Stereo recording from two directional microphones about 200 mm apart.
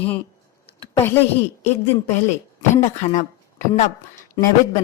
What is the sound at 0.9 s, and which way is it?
Speech, 10° left (ahead or behind).